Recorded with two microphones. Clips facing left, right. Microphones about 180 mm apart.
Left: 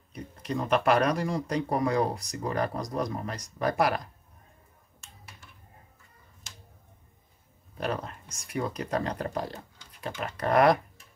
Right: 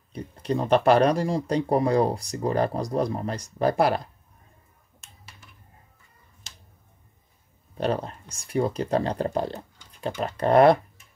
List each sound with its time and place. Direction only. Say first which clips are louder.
0.1 s speech: right 6 dB; 30° right (ahead or behind)
7.7 s speech: right 6 dB; 30° right (ahead or behind)